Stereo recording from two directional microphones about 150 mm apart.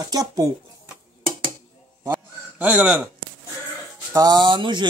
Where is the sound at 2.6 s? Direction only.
10° right (ahead or behind).